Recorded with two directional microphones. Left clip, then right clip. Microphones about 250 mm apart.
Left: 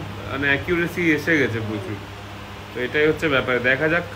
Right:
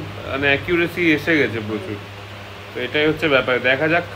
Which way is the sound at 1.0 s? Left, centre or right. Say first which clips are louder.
Right 1 dB; right.